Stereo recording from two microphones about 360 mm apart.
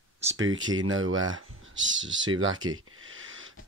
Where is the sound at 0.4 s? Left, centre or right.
Right.